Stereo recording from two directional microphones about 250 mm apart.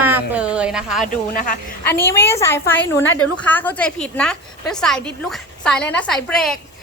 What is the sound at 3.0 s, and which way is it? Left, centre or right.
Speech, left.